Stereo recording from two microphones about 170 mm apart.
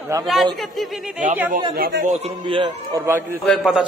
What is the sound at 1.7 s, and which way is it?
Speech, 70° right (ahead or behind).